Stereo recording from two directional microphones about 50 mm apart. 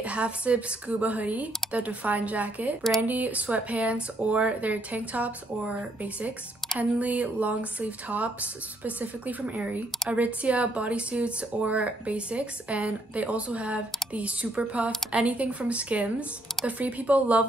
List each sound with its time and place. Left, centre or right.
0.0 s speech: right